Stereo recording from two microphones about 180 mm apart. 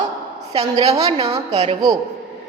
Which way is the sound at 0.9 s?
35° right (ahead or behind).